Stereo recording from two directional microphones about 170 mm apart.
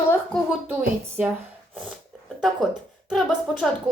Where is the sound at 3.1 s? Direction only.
5° left (ahead or behind).